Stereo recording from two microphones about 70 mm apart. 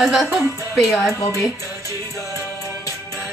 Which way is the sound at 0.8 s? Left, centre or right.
Centre.